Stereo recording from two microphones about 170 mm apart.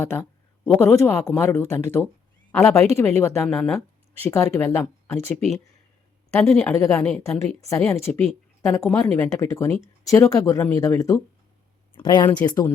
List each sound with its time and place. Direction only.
0.0 s speech: 10° left (ahead or behind)
3.4 s speech: centre (ahead or behind)
4.2 s speech: 15° left (ahead or behind)
6.3 s speech: 5° left (ahead or behind)
6.7 s speech: 20° left (ahead or behind)